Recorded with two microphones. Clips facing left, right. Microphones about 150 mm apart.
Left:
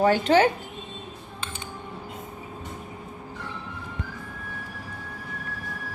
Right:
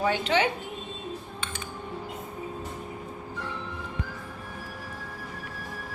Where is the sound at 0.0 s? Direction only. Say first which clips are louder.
Left 6 dB; 40° left (ahead or behind).